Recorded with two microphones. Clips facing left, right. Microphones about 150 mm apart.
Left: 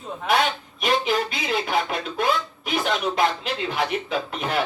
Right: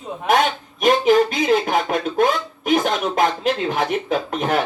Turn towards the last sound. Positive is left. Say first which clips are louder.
# right 5 dB
turn(degrees=-45)  # may be behind; listen again after turning